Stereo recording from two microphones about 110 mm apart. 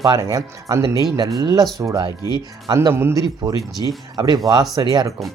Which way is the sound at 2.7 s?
25° right (ahead or behind).